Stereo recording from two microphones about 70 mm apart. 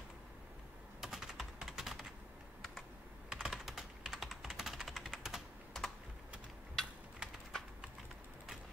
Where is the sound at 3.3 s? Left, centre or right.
Centre.